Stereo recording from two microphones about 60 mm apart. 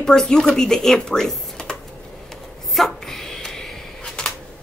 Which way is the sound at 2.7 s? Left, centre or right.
Centre.